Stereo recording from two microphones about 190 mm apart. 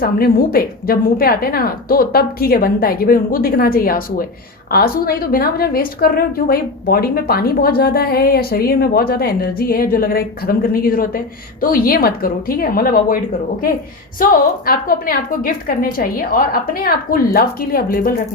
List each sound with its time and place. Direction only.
0.0 s a woman's voice: 50° left (ahead or behind)
14.2 s a woman's voice: 50° left (ahead or behind)